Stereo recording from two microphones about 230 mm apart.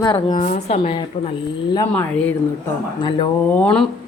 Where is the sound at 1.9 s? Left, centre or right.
Centre.